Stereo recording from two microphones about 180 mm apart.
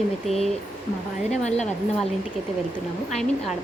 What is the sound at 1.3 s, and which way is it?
Speech, 40° left (ahead or behind).